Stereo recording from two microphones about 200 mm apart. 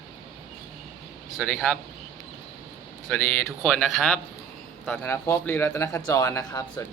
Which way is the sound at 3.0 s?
5° left (ahead or behind).